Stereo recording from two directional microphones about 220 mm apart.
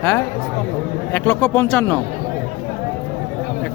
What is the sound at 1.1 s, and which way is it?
Speech, 10° left (ahead or behind).